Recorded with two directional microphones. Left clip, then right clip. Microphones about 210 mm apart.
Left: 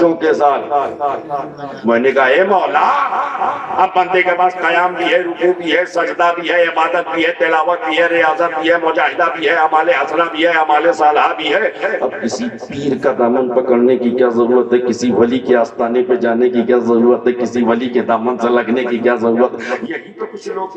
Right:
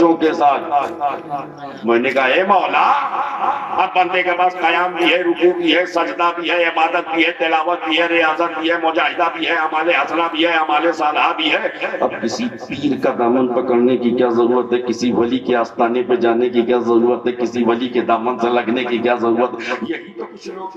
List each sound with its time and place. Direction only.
0.2 s a man's voice: 35° left (ahead or behind)
1.9 s a man's voice: 35° left (ahead or behind)
14.2 s a man's voice: 35° left (ahead or behind)